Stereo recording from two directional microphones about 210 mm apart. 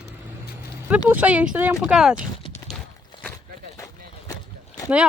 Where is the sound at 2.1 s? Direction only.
25° left (ahead or behind).